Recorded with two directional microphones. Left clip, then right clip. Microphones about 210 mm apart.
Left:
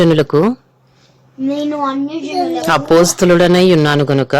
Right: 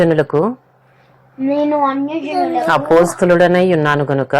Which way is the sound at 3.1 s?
35° left (ahead or behind).